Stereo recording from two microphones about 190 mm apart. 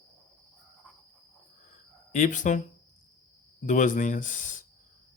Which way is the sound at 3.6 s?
40° left (ahead or behind).